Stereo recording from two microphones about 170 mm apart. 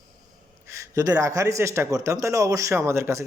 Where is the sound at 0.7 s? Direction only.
20° right (ahead or behind).